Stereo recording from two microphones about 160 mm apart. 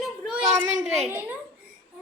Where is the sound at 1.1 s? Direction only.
15° right (ahead or behind).